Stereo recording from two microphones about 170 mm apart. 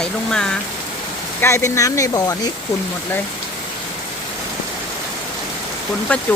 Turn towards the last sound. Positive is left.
turn(degrees=10)  # may be behind; listen again after turning